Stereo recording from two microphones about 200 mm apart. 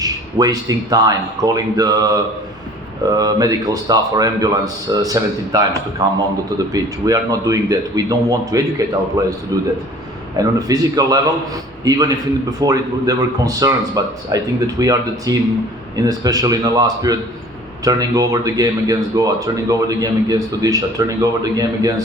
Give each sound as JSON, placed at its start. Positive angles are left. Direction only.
{"t": 0.0, "sound": "a man's voice", "side_deg": -20}
{"t": 3.1, "sound": "a man's voice", "side_deg": -20}
{"t": 10.3, "sound": "a man's voice", "side_deg": -20}